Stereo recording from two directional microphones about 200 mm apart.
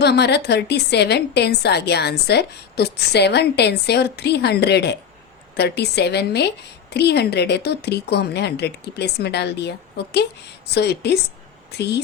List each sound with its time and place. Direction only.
0.0 s a woman's voice: 55° left (ahead or behind)